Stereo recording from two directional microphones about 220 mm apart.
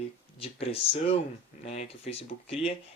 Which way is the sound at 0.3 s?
25° left (ahead or behind).